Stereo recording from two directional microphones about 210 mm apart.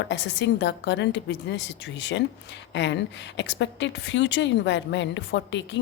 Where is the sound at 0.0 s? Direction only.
55° left (ahead or behind).